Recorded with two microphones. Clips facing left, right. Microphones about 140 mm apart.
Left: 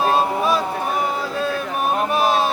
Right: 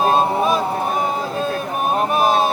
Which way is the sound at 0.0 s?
30° right (ahead or behind).